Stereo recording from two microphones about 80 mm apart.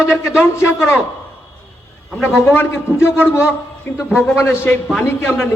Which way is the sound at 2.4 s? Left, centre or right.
Left.